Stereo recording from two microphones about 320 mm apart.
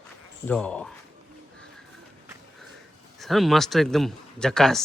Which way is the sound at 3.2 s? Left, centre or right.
Centre.